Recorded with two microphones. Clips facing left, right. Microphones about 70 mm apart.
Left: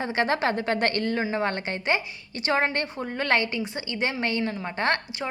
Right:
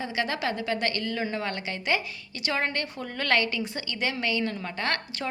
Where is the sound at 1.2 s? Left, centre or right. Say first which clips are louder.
Left 4 dB; left.